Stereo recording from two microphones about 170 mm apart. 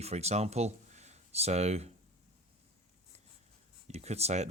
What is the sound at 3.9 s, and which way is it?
Speech, 40° right (ahead or behind).